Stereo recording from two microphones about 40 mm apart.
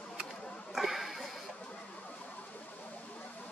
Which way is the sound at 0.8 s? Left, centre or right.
Centre.